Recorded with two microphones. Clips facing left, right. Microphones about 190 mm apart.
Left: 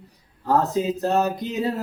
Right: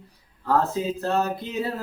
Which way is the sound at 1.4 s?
15° left (ahead or behind).